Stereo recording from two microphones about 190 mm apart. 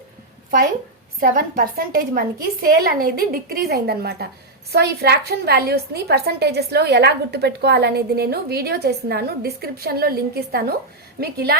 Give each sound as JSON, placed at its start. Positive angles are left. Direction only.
{"t": 1.2, "sound": "a woman's voice", "side_deg": -45}